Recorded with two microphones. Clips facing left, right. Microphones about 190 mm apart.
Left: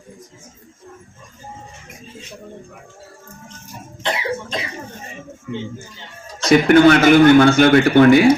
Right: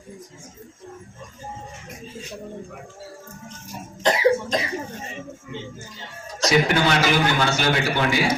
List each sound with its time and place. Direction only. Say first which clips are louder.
4.0 s cough: right 5 dB; 40° right (ahead or behind)
6.5 s a man's voice: left 10 dB; 55° left (ahead or behind)